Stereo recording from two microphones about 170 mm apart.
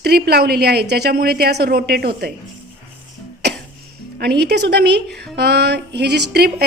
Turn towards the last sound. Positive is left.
turn(degrees=-70)  # may be behind; listen again after turning